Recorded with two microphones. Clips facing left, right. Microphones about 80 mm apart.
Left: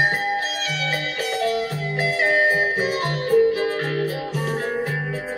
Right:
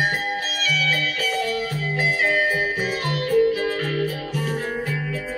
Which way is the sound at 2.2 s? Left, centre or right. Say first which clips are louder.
Left 4 dB; left.